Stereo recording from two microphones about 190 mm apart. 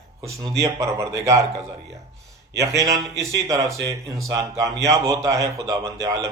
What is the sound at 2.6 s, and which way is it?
A man's voice, 15° right (ahead or behind).